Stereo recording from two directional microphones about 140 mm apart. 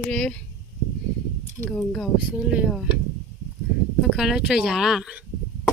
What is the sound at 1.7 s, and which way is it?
Speech, 5° left (ahead or behind).